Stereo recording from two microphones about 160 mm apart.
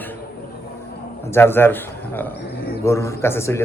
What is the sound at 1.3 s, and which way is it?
Speech, 15° left (ahead or behind).